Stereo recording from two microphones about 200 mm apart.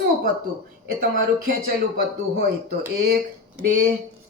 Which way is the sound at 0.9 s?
45° right (ahead or behind).